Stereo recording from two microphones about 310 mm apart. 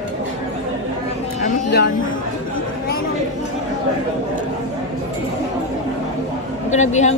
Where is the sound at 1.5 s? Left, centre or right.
Left.